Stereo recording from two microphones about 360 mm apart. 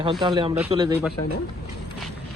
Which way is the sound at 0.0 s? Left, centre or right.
Centre.